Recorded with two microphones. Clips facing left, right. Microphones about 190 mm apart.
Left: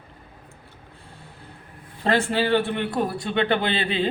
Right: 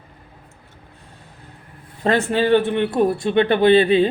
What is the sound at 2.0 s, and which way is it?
Speech, 20° right (ahead or behind).